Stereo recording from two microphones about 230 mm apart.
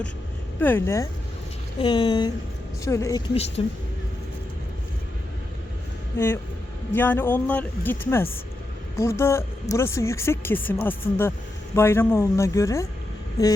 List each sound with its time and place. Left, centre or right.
0.6 s speech: centre
3.6 s speech: left
6.1 s speech: centre